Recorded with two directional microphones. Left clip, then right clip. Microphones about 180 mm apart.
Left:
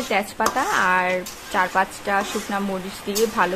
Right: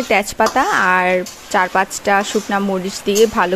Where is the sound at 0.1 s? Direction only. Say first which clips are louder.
Right 7 dB; 40° right (ahead or behind).